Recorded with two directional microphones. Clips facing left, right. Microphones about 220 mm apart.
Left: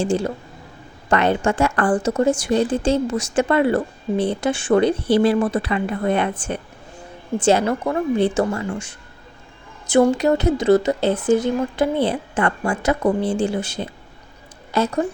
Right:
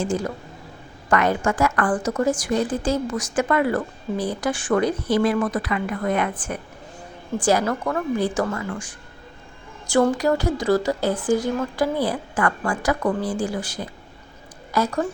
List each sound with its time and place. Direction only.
0.0 s a woman's voice: 30° left (ahead or behind)